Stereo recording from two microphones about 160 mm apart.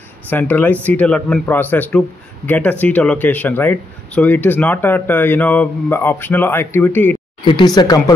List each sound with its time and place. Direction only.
0.3 s speech: 10° left (ahead or behind)
7.4 s speech: 25° left (ahead or behind)